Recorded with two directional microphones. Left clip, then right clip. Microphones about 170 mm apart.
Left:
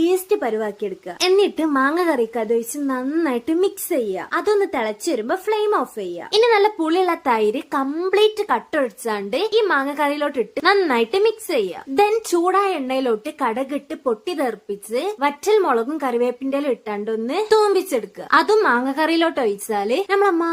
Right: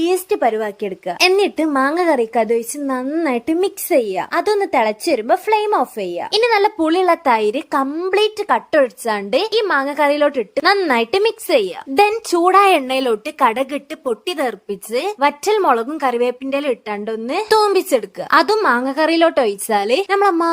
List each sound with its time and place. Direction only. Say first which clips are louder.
0.0 s a woman's voice: right 3 dB; 30° right (ahead or behind)
12.6 s a woman's voice: right 6 dB; 50° right (ahead or behind)
20.1 s speech: right 1 dB; 25° right (ahead or behind)